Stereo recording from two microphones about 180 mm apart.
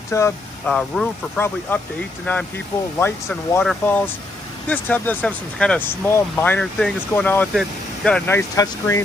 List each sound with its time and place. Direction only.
0.1 s speech: 15° left (ahead or behind)
8.3 s speech: 15° left (ahead or behind)